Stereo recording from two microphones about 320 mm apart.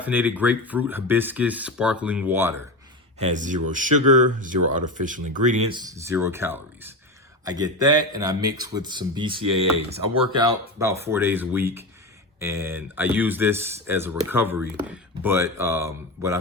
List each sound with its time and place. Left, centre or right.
0.0 s speech: centre
3.2 s speech: right